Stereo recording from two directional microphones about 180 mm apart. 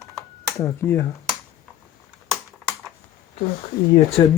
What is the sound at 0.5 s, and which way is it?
Speech, 15° left (ahead or behind).